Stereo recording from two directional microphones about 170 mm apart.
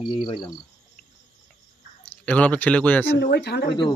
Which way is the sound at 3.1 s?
80° left.